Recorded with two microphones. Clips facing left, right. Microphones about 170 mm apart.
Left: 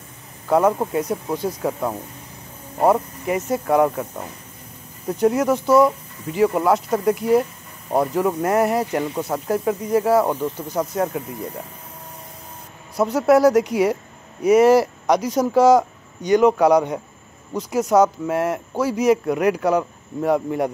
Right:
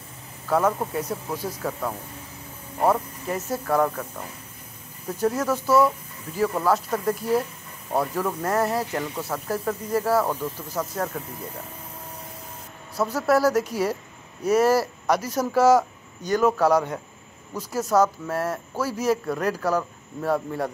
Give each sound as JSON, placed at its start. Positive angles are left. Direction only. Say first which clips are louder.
{"t": 0.5, "sound": "speech", "louder": "left 5 dB", "side_deg": 20}
{"t": 5.2, "sound": "speech", "louder": "left 6 dB", "side_deg": 15}
{"t": 12.9, "sound": "speech", "louder": "left 6 dB", "side_deg": 20}